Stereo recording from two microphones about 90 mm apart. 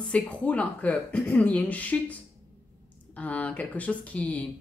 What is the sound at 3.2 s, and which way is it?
A woman's voice, 15° left (ahead or behind).